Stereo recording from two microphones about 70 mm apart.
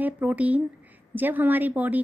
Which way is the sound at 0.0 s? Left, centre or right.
Right.